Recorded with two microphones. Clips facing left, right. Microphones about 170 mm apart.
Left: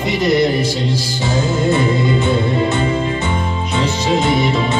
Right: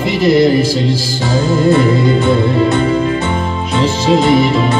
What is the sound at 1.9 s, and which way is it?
Music, 50° right (ahead or behind).